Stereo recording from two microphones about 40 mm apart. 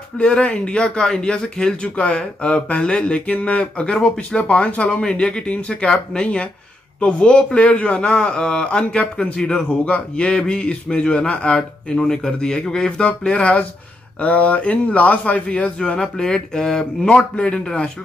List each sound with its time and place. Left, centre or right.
0.2 s speech: left
12.0 s speech: left
15.8 s speech: left